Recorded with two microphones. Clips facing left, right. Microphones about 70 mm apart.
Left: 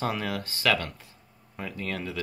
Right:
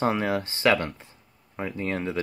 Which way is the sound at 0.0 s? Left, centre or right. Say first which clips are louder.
Right 5 dB; right.